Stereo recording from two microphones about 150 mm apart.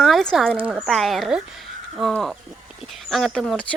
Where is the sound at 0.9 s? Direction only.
Centre (ahead or behind).